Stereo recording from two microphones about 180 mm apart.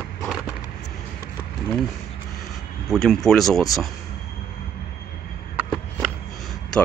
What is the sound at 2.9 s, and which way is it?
Speech, centre (ahead or behind).